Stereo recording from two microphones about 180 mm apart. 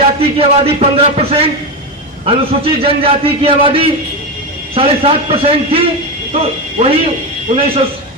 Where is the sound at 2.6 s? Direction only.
30° right (ahead or behind).